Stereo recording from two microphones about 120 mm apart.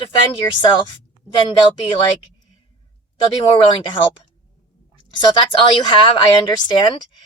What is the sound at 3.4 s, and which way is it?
Speech, 45° left (ahead or behind).